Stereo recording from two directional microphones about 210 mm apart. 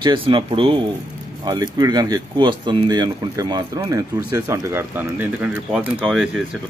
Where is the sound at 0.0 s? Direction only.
25° right (ahead or behind); by 6.2 s 5° right (ahead or behind).